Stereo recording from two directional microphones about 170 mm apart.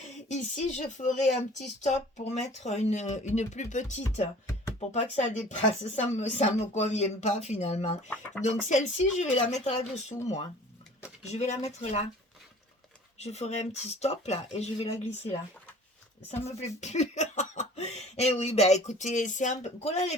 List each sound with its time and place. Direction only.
0.3 s speech: 45° left (ahead or behind)
11.2 s speech: 40° left (ahead or behind)
13.1 s speech: 40° left (ahead or behind)